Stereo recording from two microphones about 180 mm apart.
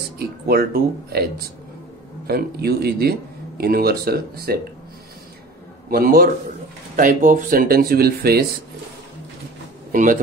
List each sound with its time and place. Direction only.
0.5 s speech: 60° right (ahead or behind)
2.2 s speech: 60° right (ahead or behind)
5.9 s speech: 55° right (ahead or behind)